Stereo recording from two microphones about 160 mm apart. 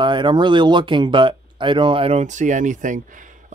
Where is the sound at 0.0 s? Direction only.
30° right (ahead or behind).